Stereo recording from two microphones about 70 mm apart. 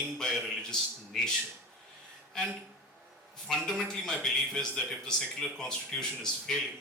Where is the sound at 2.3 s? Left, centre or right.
Centre.